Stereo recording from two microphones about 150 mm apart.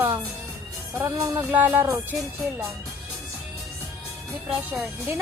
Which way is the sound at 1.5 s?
10° right (ahead or behind).